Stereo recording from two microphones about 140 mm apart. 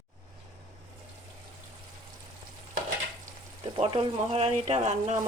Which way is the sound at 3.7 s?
40° right (ahead or behind).